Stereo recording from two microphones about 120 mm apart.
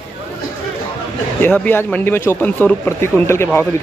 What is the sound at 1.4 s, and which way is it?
A man's voice, 15° left (ahead or behind).